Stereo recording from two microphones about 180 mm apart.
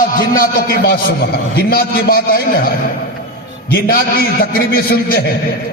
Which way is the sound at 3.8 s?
55° left (ahead or behind).